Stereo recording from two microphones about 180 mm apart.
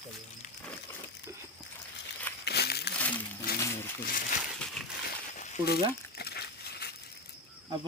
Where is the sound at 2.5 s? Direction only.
65° left (ahead or behind).